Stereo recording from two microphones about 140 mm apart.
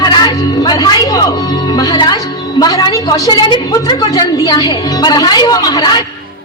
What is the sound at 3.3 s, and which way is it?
A woman's voice, 35° left (ahead or behind).